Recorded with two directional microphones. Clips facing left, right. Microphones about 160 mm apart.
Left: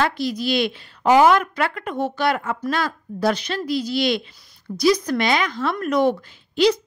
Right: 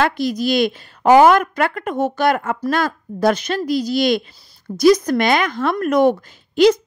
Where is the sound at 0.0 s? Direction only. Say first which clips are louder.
Right 4 dB; 45° right (ahead or behind).